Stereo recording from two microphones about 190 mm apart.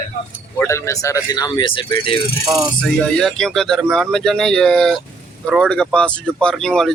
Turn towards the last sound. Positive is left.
turn(degrees=0)  # may be behind; listen again after turning